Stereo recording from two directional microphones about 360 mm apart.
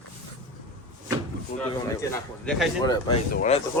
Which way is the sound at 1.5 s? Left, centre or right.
Centre.